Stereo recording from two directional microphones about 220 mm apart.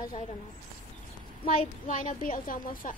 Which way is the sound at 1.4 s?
25° left (ahead or behind).